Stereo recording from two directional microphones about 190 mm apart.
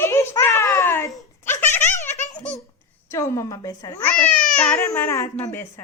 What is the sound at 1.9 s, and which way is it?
Giggle, 40° left (ahead or behind).